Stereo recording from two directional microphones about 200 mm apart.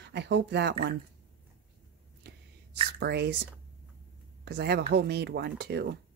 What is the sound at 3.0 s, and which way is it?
Speech, 55° right (ahead or behind).